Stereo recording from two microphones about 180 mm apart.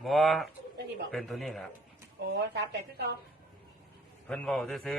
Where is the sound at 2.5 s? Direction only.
65° right (ahead or behind).